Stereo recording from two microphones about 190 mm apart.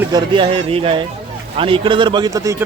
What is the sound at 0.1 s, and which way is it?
A man's voice, 25° right (ahead or behind).